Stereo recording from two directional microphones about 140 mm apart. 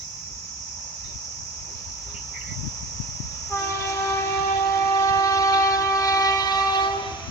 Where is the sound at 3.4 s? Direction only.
25° left (ahead or behind).